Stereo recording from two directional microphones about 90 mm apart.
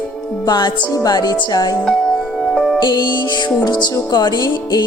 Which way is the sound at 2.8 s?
60° left (ahead or behind).